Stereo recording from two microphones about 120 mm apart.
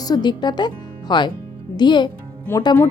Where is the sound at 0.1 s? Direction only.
40° left (ahead or behind).